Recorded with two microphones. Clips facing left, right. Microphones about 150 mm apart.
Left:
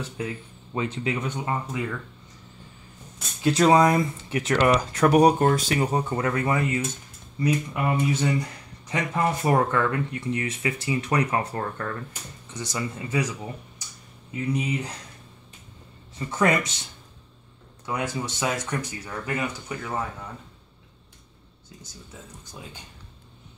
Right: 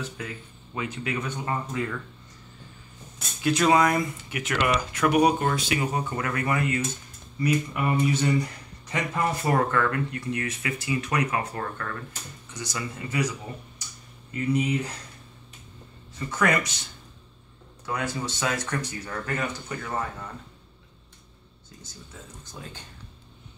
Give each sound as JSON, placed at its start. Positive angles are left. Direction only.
{"t": 0.7, "sound": "speech", "side_deg": 25}
{"t": 3.4, "sound": "speech", "side_deg": 30}
{"t": 14.5, "sound": "speech", "side_deg": 15}
{"t": 16.2, "sound": "speech", "side_deg": 25}
{"t": 17.8, "sound": "speech", "side_deg": 15}